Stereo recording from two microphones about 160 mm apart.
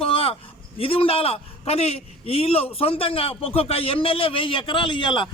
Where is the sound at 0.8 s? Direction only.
35° left (ahead or behind).